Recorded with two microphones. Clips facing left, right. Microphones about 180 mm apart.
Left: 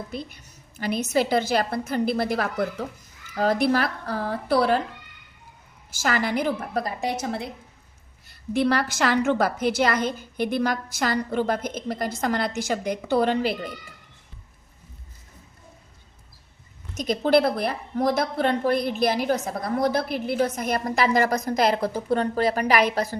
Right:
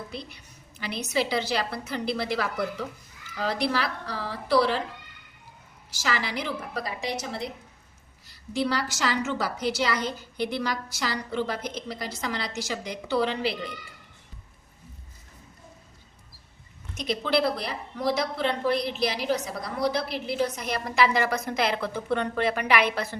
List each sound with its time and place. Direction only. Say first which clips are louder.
0.1 s a woman's voice: left 5 dB; 45° left (ahead or behind)
5.9 s a woman's voice: left 5 dB; 50° left (ahead or behind)
16.9 s a woman's voice: left 6 dB; 45° left (ahead or behind)